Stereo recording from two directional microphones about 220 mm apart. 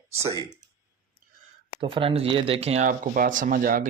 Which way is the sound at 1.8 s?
25° right (ahead or behind).